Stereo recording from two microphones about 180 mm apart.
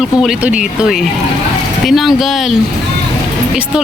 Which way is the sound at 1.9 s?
Centre (ahead or behind).